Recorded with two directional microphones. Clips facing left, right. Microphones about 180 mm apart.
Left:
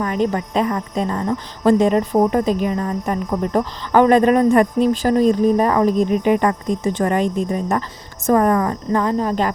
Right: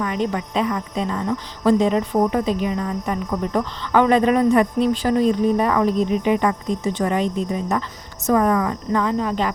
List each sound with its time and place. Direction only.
0.0 s speech: 45° left (ahead or behind)